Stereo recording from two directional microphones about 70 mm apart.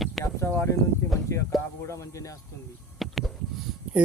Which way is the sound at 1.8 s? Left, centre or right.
Left.